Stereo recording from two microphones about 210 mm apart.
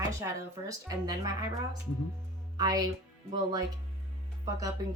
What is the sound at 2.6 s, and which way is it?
Speech, 15° right (ahead or behind).